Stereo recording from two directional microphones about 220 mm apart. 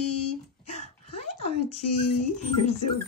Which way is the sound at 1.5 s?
90° left.